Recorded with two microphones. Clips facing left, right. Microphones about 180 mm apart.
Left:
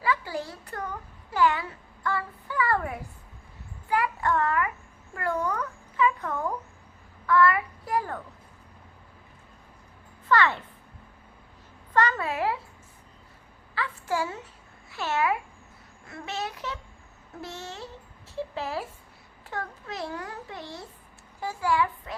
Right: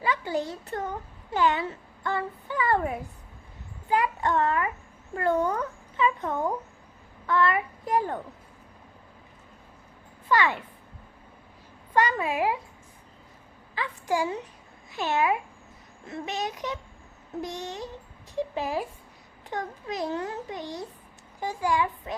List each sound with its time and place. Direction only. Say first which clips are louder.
0.0 s a child's voice: right 1 dB; 20° right (ahead or behind)
10.2 s a child's voice: left 1 dB; 10° right (ahead or behind)
11.9 s a child's voice: right 1 dB; 15° right (ahead or behind)
13.7 s a child's voice: right 2 dB; 15° right (ahead or behind)